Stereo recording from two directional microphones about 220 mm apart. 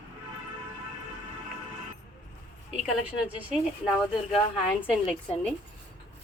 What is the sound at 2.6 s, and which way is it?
Speech, 5° right (ahead or behind).